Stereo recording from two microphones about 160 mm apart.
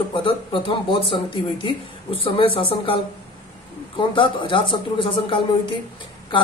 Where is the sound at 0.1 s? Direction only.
30° left (ahead or behind).